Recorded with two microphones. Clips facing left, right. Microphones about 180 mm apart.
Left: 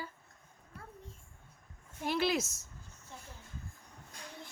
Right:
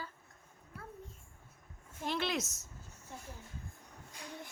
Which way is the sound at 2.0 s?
5° left (ahead or behind).